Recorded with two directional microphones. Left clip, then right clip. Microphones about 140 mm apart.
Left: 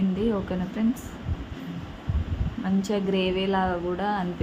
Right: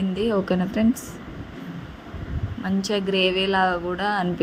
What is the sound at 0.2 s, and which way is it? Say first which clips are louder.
Speech: right 8 dB; 35° right (ahead or behind).